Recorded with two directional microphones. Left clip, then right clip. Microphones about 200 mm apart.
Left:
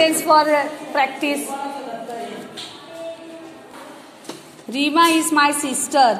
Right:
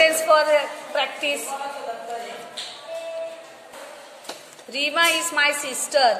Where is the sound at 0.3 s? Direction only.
10° left (ahead or behind).